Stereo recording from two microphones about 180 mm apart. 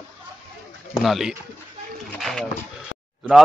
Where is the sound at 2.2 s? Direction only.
5° left (ahead or behind).